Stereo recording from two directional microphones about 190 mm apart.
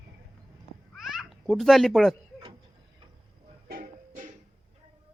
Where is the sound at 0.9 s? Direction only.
Centre (ahead or behind).